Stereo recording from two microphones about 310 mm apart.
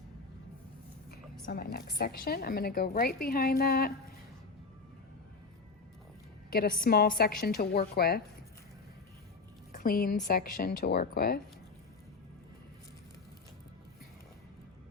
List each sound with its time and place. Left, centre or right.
1.5 s a woman's voice: left
6.5 s a woman's voice: left
9.7 s a woman's voice: left